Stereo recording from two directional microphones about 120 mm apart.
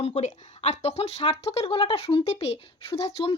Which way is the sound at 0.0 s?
60° left (ahead or behind).